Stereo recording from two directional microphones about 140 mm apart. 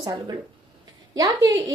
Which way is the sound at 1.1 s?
25° right (ahead or behind).